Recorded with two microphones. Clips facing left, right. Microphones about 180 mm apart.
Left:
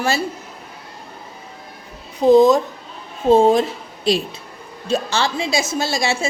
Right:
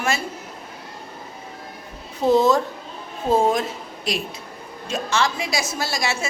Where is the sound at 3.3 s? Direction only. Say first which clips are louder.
Left 6 dB; 30° left (ahead or behind).